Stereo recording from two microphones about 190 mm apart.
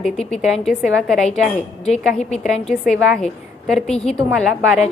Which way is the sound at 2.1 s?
35° left (ahead or behind).